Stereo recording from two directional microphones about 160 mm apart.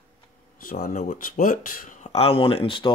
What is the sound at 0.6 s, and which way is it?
Speech, 65° left (ahead or behind).